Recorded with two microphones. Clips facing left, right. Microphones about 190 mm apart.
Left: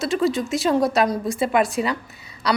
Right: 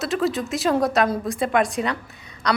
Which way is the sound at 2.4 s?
5° left (ahead or behind).